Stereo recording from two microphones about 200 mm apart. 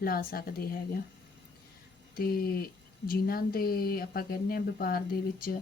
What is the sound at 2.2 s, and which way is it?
Speech, 50° left (ahead or behind).